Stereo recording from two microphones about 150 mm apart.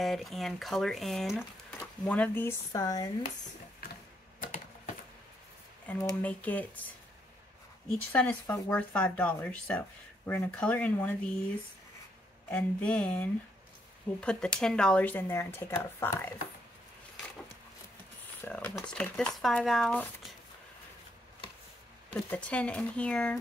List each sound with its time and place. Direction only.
0.0 s speech: centre (ahead or behind); by 3.1 s 25° left (ahead or behind)
4.4 s a sound: 65° left (ahead or behind)
5.9 s speech: 10° left (ahead or behind)
8.1 s speech: 10° left (ahead or behind)
12.4 s speech: 10° left (ahead or behind)
18.4 s speech: 10° left (ahead or behind)
22.1 s speech: 10° left (ahead or behind)